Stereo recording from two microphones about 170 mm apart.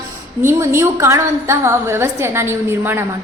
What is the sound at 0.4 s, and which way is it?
A woman's voice, 15° right (ahead or behind).